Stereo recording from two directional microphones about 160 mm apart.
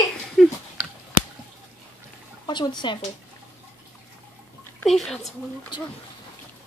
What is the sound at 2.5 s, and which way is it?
Speech, 30° left (ahead or behind).